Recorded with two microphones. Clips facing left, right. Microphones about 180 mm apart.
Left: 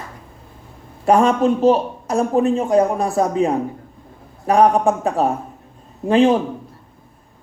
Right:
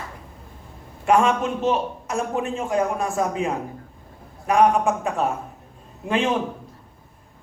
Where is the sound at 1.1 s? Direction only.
35° left (ahead or behind).